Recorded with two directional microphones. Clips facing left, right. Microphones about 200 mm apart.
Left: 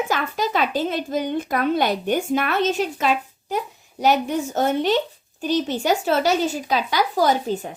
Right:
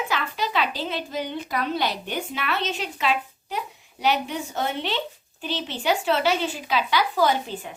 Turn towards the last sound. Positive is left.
turn(degrees=40)  # may be behind; listen again after turning